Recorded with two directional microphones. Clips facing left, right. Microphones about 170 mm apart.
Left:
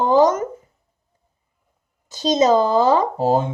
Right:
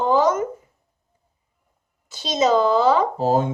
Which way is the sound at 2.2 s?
40° left (ahead or behind).